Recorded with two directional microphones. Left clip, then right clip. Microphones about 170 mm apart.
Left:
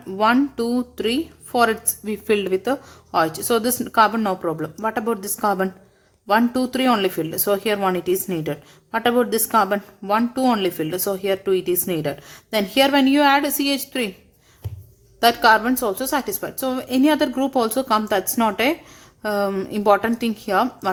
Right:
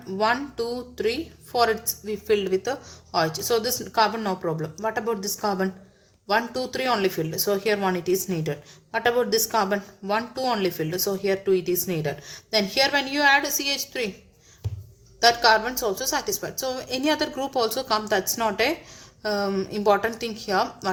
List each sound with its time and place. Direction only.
0.2 s speech: 40° left (ahead or behind)
15.2 s speech: 40° left (ahead or behind)